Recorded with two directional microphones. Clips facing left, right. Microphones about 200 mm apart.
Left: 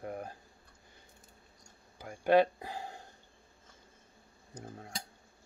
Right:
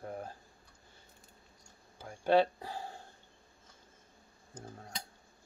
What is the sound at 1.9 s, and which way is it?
Speech, 10° left (ahead or behind).